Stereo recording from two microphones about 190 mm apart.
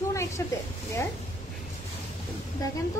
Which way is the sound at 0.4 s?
15° left (ahead or behind).